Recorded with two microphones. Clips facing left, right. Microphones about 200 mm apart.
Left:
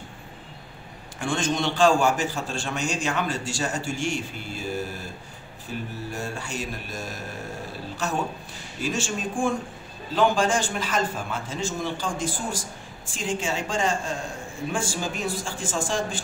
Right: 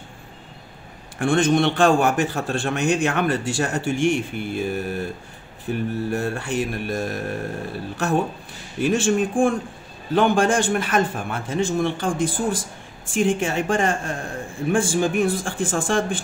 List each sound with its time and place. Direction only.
1.2 s a man's voice: 60° right (ahead or behind)
8.8 s a man's voice: 55° right (ahead or behind)